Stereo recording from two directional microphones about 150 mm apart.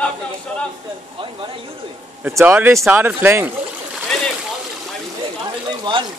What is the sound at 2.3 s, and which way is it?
Speech, 15° right (ahead or behind).